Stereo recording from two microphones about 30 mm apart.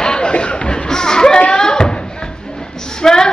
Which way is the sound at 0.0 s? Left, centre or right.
Left.